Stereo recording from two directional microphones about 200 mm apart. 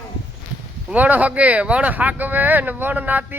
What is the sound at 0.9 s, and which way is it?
Speech, 10° right (ahead or behind).